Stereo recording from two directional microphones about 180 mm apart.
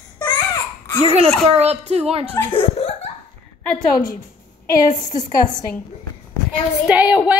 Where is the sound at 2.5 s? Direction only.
30° left (ahead or behind).